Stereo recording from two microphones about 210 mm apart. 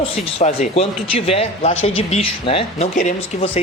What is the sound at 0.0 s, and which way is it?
Speech, 30° left (ahead or behind).